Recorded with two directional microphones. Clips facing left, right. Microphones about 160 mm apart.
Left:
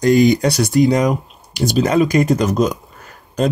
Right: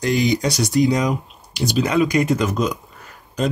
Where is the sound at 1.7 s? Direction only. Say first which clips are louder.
Left 3 dB; 45° left (ahead or behind).